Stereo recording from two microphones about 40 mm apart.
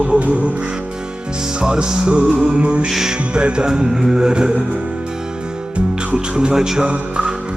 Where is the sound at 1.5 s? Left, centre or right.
Right.